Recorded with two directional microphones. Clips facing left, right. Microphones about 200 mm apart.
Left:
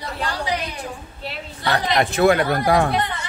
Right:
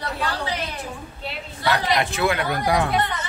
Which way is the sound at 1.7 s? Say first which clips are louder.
Left 5 dB; 40° left (ahead or behind).